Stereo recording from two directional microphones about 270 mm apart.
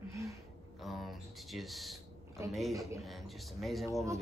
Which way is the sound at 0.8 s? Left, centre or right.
Centre.